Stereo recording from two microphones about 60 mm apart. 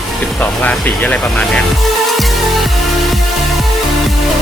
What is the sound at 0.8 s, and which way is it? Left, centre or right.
Speech, left.